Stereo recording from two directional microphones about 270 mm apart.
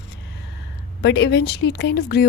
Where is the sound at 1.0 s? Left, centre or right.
Left.